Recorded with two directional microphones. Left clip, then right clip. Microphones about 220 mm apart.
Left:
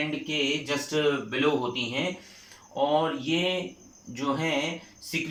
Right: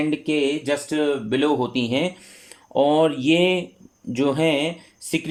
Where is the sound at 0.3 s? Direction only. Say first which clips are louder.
Right 6 dB; 45° right (ahead or behind).